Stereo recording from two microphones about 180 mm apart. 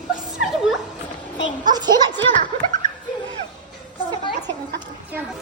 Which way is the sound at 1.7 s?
20° right (ahead or behind).